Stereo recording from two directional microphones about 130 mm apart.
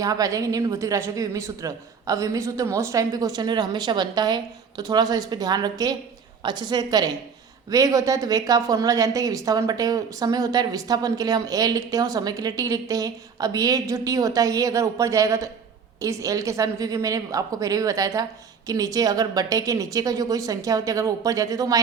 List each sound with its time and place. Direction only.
0.0 s a woman's voice: 25° right (ahead or behind)